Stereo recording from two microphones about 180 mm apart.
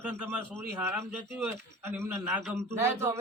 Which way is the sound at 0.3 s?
10° right (ahead or behind).